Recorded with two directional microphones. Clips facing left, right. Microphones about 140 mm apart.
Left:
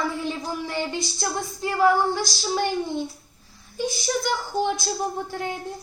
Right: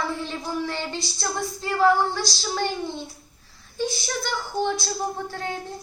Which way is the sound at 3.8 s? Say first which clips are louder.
Even; 15° left (ahead or behind).